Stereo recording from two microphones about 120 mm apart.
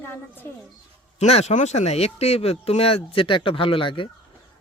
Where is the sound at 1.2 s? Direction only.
65° left (ahead or behind).